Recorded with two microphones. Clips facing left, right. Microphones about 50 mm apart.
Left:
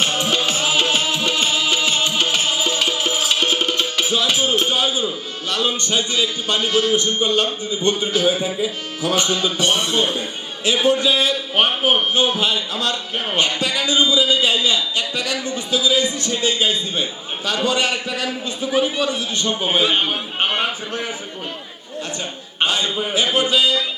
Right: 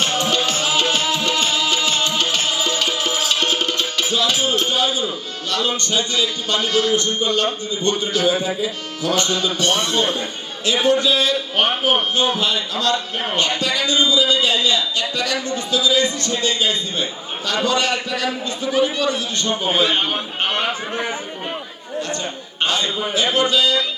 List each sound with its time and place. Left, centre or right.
0.0 s music: centre
5.5 s a man's voice: centre
22.6 s a man's voice: centre